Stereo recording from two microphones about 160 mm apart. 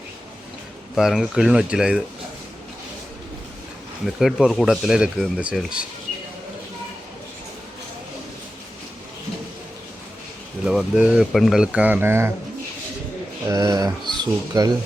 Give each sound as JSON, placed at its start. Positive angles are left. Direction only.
{"t": 0.9, "sound": "speech", "side_deg": 0}
{"t": 4.0, "sound": "speech", "side_deg": 0}
{"t": 10.7, "sound": "speech", "side_deg": -5}
{"t": 13.5, "sound": "speech", "side_deg": -20}